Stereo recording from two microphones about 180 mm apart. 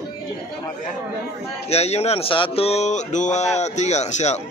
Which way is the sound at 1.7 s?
35° left (ahead or behind).